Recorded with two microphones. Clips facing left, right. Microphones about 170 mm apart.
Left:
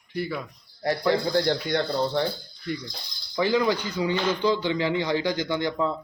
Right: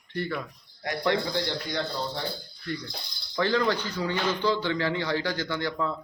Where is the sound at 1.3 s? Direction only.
50° left (ahead or behind).